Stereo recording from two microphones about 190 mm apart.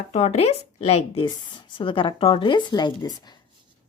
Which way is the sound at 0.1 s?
35° left (ahead or behind).